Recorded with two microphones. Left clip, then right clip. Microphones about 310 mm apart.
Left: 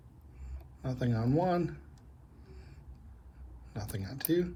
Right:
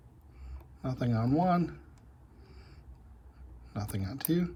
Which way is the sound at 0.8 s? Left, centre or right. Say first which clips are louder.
Right 2 dB; centre.